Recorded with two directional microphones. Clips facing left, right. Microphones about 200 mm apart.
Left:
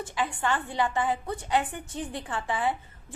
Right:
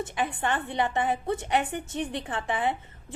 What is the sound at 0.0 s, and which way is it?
A woman's voice, 20° right (ahead or behind).